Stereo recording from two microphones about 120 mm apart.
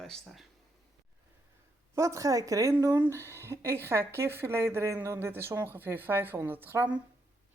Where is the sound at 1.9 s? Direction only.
25° right (ahead or behind).